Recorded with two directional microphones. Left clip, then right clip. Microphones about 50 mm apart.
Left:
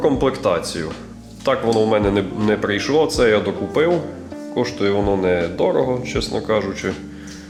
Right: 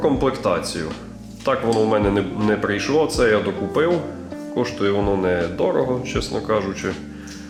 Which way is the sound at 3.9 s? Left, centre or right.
Centre.